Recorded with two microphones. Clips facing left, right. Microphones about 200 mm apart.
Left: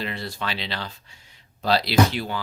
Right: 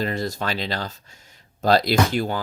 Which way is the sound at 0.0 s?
45° right (ahead or behind).